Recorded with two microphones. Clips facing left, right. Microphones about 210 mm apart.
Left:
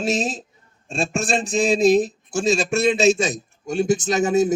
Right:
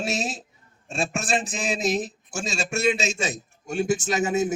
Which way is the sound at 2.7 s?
35° left (ahead or behind).